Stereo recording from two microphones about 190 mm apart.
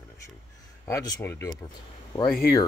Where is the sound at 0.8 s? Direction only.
15° left (ahead or behind).